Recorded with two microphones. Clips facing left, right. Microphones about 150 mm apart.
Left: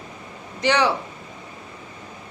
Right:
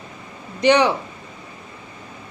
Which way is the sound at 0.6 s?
20° right (ahead or behind).